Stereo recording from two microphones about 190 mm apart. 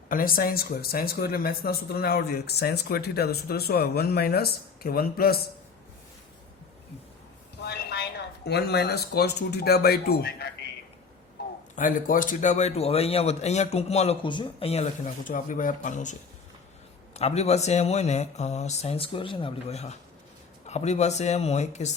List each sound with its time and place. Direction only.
0.1 s speech: 50° left (ahead or behind)
7.6 s train: 60° left (ahead or behind)
8.4 s speech: 60° left (ahead or behind)
11.8 s a man's voice: 45° left (ahead or behind)
17.2 s a man's voice: 35° left (ahead or behind)